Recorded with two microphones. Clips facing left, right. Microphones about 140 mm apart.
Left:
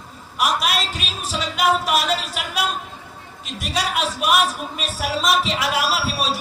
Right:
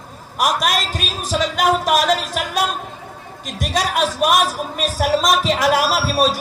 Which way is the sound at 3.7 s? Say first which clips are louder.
Right 4 dB; 40° right (ahead or behind).